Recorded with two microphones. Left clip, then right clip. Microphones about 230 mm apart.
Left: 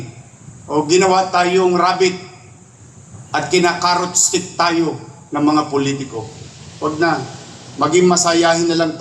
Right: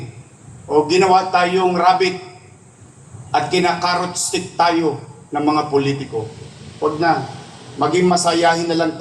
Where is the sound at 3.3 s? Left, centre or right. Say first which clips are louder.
Left 1 dB; left.